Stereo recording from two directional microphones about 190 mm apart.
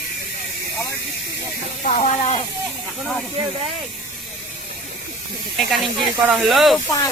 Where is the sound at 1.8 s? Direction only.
35° left (ahead or behind).